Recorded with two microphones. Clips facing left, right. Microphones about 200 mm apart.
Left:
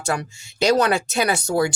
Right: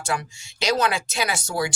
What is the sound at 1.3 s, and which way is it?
Speech, 60° left (ahead or behind).